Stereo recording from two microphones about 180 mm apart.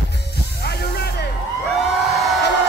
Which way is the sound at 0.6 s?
65° left (ahead or behind).